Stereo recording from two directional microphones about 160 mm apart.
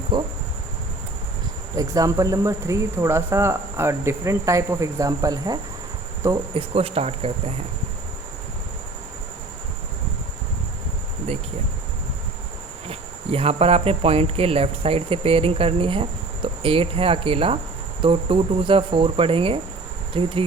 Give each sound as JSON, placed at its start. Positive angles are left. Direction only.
{"t": 0.1, "sound": "speech", "side_deg": -30}
{"t": 1.7, "sound": "speech", "side_deg": -20}
{"t": 6.5, "sound": "speech", "side_deg": -35}
{"t": 12.9, "sound": "speech", "side_deg": -40}